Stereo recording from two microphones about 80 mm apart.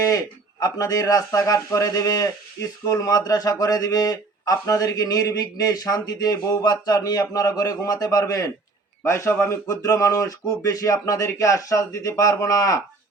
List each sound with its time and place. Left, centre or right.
0.6 s a man's voice: left
9.0 s a man's voice: left